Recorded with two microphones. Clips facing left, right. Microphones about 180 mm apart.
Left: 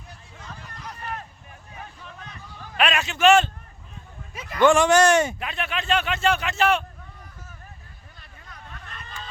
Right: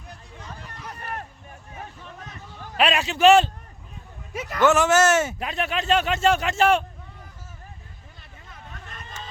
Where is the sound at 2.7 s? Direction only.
30° right (ahead or behind).